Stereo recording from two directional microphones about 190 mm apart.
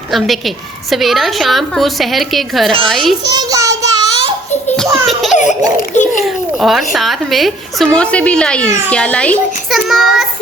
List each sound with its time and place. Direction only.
0.1 s a woman's voice: centre (ahead or behind)
3.2 s child singing: 20° right (ahead or behind)
5.0 s a child's voice: centre (ahead or behind)
5.4 s laughter: 40° left (ahead or behind)
6.2 s a woman's voice: centre (ahead or behind)